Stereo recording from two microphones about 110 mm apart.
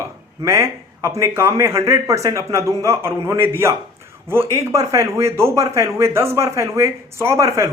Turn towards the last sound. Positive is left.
turn(degrees=-25)  # may be behind; listen again after turning